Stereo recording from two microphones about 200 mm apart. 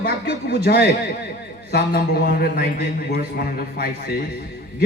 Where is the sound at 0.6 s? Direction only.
55° left (ahead or behind).